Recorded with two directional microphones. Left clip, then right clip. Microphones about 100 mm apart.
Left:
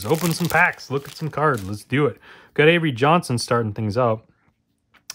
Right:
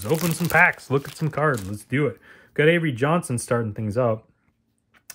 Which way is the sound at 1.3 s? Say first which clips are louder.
Left 2 dB; 25° left (ahead or behind).